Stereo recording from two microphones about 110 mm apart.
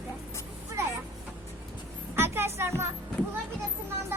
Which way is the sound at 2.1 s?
20° right (ahead or behind).